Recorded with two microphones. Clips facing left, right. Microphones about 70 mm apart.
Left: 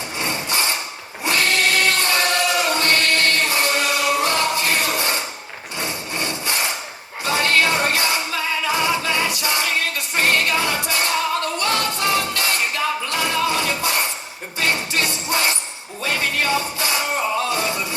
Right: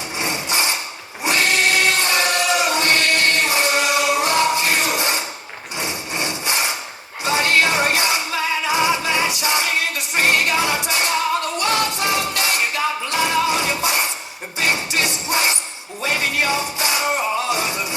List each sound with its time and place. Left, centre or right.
0.2 s wood: centre
1.2 s a sound: centre
5.8 s wood: centre
7.3 s music: centre